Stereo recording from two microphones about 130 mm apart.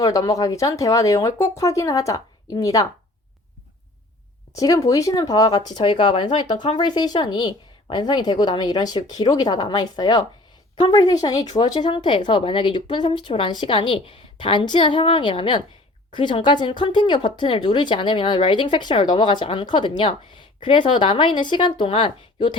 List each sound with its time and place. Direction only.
0.0 s speech: 25° left (ahead or behind)
4.5 s speech: 25° left (ahead or behind)